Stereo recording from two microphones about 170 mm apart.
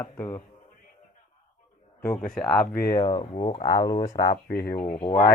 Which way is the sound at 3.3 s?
40° left (ahead or behind).